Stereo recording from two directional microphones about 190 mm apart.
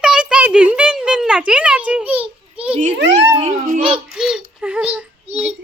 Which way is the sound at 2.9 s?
65° right (ahead or behind).